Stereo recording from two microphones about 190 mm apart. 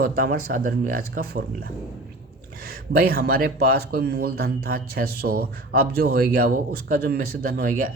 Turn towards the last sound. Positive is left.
turn(degrees=-50)  # may be behind; listen again after turning